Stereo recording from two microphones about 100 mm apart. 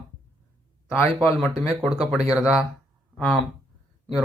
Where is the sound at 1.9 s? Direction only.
5° right (ahead or behind).